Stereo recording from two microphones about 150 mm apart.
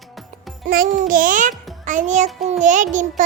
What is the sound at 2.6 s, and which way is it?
Music, 55° right (ahead or behind).